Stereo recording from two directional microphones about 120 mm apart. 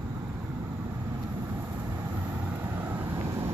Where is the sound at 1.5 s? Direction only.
20° right (ahead or behind).